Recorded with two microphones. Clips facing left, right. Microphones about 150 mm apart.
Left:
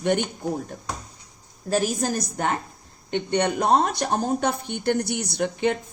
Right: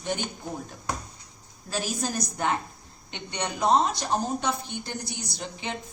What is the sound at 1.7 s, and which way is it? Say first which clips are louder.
A woman's voice: left 7 dB; 50° left (ahead or behind).